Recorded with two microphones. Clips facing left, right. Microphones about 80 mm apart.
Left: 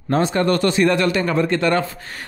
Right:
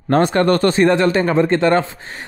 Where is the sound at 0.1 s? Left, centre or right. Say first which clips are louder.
Right 4 dB; right.